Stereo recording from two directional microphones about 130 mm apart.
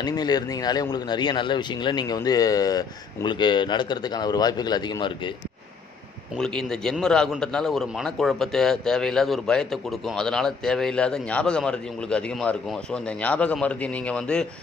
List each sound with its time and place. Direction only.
0.0 s speech: 30° left (ahead or behind)
6.3 s a man's voice: 5° left (ahead or behind)